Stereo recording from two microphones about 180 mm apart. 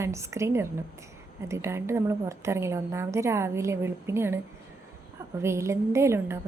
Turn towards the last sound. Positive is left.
turn(degrees=-15)  # may be behind; listen again after turning